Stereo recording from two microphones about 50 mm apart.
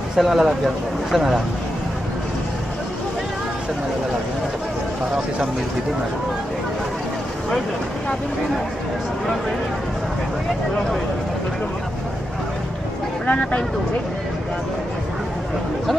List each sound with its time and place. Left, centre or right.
0.1 s speech: centre
13.3 s speech: left